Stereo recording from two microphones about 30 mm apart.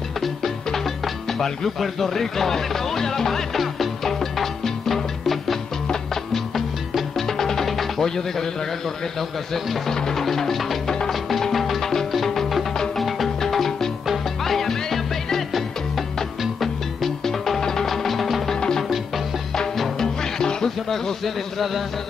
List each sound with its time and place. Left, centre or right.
1.8 s speech: centre
3.5 s music: centre
9.8 s speech: centre
11.1 s music: centre
11.8 s music: centre
12.1 s music: centre
16.6 s music: centre
17.8 s music: centre